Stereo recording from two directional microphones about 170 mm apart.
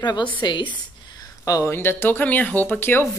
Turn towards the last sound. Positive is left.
turn(degrees=15)  # may be behind; listen again after turning